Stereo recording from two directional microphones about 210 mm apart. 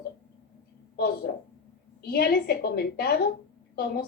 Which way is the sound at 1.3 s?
50° left (ahead or behind).